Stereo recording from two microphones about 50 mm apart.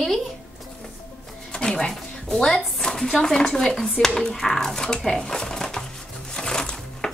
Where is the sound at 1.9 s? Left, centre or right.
Centre.